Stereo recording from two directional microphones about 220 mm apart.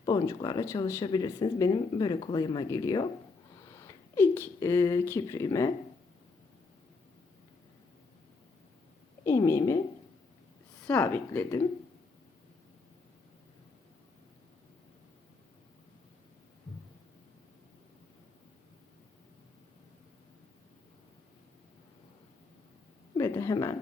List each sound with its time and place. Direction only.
0.0 s speech: 15° left (ahead or behind)
9.2 s speech: 10° left (ahead or behind)
10.8 s speech: 10° left (ahead or behind)
23.1 s a woman's voice: 15° left (ahead or behind)